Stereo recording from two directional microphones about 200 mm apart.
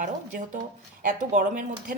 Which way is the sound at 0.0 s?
40° right (ahead or behind).